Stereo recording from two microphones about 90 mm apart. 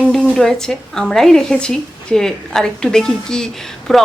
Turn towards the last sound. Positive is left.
turn(degrees=5)  # may be behind; listen again after turning